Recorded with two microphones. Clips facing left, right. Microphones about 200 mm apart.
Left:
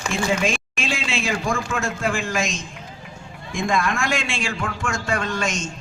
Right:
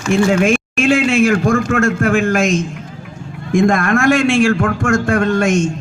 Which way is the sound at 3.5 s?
60° right (ahead or behind).